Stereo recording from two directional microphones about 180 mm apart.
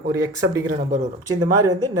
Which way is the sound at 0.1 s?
20° right (ahead or behind).